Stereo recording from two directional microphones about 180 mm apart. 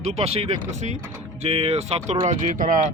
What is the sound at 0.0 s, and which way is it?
Speech, 35° right (ahead or behind).